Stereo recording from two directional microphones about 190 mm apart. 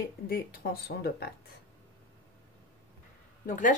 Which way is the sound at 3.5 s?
40° left (ahead or behind).